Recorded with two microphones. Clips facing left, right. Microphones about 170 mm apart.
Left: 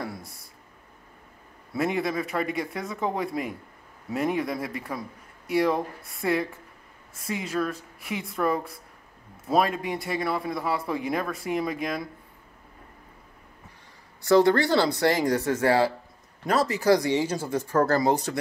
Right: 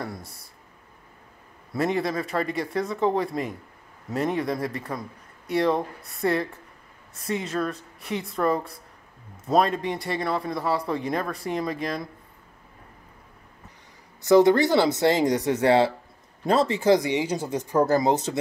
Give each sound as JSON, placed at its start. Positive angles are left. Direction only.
{"t": 0.0, "sound": "a sound", "side_deg": 0}
{"t": 1.7, "sound": "speech", "side_deg": 5}
{"t": 14.2, "sound": "speech", "side_deg": -20}